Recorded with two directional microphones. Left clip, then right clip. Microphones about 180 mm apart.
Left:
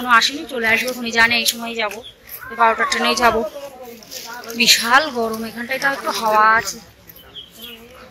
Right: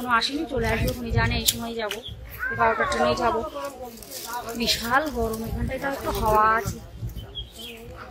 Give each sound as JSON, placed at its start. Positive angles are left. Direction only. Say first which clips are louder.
{"t": 0.0, "sound": "speech", "louder": "left 8 dB", "side_deg": -5}
{"t": 1.6, "sound": "speech", "louder": "left 7 dB", "side_deg": -15}
{"t": 2.5, "sound": "speech", "louder": "left 6 dB", "side_deg": -5}
{"t": 4.6, "sound": "speech", "louder": "left 10 dB", "side_deg": -10}